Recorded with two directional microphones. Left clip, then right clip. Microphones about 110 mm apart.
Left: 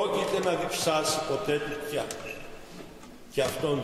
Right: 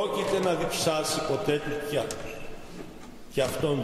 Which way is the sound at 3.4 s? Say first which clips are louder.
Even; 10° right (ahead or behind).